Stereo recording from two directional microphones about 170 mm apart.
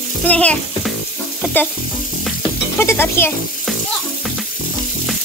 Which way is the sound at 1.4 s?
10° left (ahead or behind).